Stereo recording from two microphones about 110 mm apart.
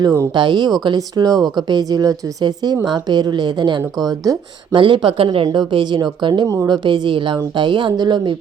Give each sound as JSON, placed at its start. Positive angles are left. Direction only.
{"t": 0.0, "sound": "speech", "side_deg": -30}
{"t": 0.3, "sound": "a woman's voice", "side_deg": -45}
{"t": 5.5, "sound": "a woman's voice", "side_deg": -45}
{"t": 6.5, "sound": "speech", "side_deg": -30}
{"t": 6.8, "sound": "a woman's voice", "side_deg": -45}